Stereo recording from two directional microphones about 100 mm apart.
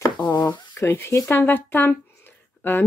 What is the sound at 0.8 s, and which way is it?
Speech, 25° left (ahead or behind).